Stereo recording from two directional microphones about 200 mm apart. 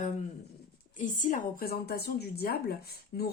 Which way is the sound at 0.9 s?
40° left (ahead or behind).